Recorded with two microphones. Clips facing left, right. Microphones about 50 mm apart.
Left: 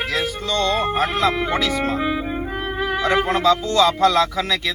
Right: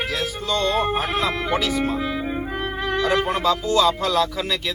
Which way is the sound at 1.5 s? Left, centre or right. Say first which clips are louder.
Left 1 dB; left.